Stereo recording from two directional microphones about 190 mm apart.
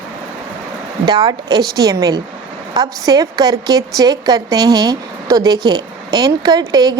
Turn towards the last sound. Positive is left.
turn(degrees=-20)  # may be behind; listen again after turning